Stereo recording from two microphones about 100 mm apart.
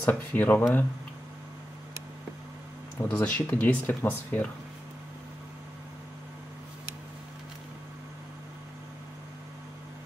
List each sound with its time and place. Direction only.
0.0 s speech: 15° left (ahead or behind)
3.0 s speech: 20° left (ahead or behind)